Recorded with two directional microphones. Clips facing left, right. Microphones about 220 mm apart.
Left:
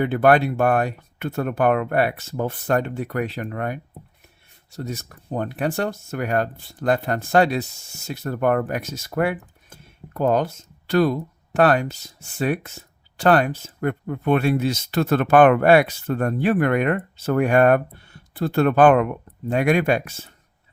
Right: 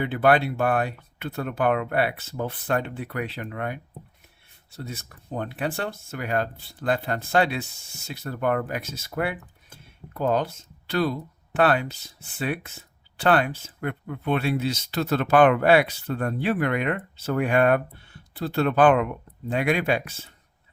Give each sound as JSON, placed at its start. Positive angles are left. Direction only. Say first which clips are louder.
{"t": 0.0, "sound": "speech", "louder": "left 4 dB", "side_deg": 45}
{"t": 4.8, "sound": "speech", "louder": "left 6 dB", "side_deg": 40}